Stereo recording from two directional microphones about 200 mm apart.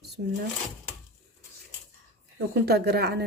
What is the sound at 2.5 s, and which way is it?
Speech, 55° right (ahead or behind).